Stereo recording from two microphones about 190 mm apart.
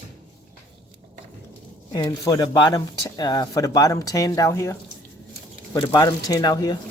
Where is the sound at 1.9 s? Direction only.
20° left (ahead or behind).